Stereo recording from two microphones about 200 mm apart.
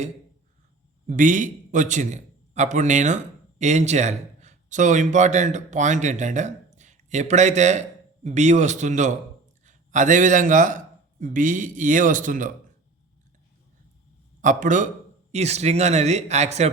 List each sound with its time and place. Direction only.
1.0 s a man's voice: 40° right (ahead or behind)
14.4 s speech: 40° right (ahead or behind)